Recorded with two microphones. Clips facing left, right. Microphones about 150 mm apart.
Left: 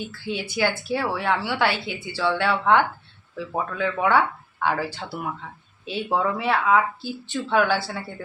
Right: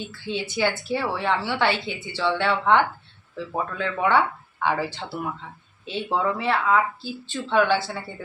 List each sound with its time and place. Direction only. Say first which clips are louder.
0.3 s speech: even; 5° left (ahead or behind)